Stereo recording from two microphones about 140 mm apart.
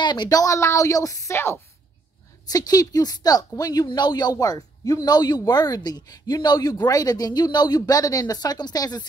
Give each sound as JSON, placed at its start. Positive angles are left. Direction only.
{"t": 0.0, "sound": "speech", "side_deg": 30}